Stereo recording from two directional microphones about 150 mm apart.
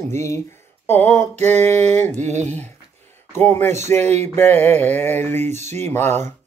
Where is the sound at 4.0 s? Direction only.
50° right (ahead or behind).